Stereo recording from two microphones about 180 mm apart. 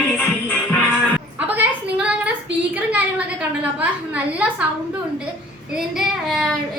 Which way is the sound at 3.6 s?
10° right (ahead or behind).